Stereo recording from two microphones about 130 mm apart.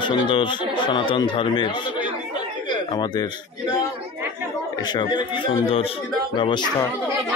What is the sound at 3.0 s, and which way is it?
Speech, 30° left (ahead or behind).